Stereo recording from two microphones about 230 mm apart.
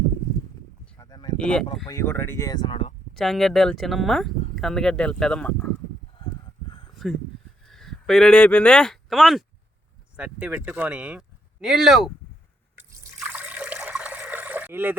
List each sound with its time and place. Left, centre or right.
0.9 s a sound: centre
1.4 s speech: centre; by 2.9 s left
3.2 s speech: centre
6.1 s a sound: left
7.6 s speech: centre
13.1 s water: centre